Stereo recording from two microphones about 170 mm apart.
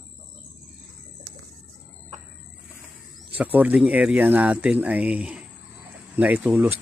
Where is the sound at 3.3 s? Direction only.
10° right (ahead or behind).